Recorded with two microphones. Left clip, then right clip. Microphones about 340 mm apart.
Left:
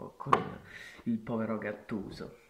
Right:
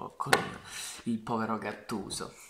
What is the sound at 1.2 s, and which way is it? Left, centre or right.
Speech, right.